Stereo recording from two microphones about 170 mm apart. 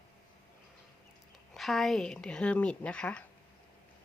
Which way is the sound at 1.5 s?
Centre (ahead or behind).